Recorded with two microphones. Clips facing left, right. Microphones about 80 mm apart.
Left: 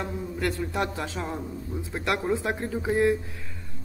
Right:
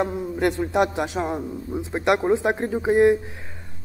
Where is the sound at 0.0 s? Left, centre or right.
Right.